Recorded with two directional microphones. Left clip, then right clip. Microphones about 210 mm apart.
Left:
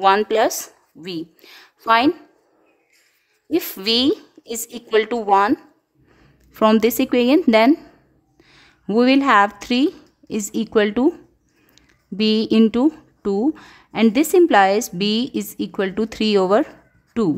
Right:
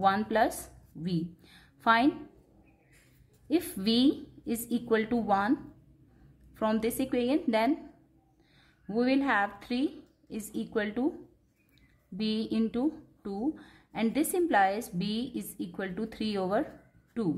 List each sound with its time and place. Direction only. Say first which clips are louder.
0.0 s a woman's voice: left 11 dB; 40° left (ahead or behind)
3.5 s a woman's voice: left 10 dB; 40° left (ahead or behind)
6.5 s a woman's voice: left 14 dB; 40° left (ahead or behind)